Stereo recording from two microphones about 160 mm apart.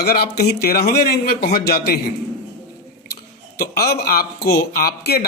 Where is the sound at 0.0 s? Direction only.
70° left (ahead or behind).